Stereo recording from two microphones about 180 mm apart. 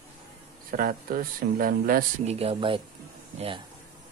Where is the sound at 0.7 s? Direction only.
50° right (ahead or behind).